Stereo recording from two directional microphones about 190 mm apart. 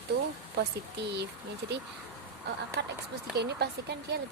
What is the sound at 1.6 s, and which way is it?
Speech, 60° right (ahead or behind).